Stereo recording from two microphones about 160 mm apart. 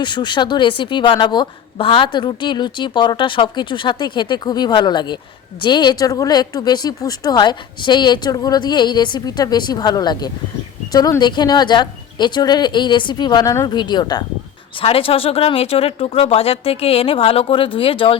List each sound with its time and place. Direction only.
0.0 s a woman's voice: 30° left (ahead or behind)